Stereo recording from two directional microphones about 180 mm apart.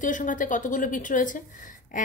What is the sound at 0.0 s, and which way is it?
A woman's voice, 45° left (ahead or behind).